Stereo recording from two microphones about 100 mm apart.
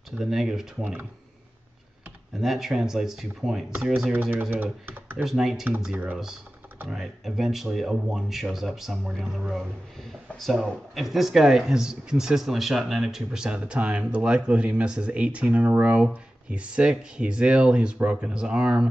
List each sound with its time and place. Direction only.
0.2 s speech: 5° right (ahead or behind)
2.4 s speech: 5° right (ahead or behind)
5.2 s speech: centre (ahead or behind)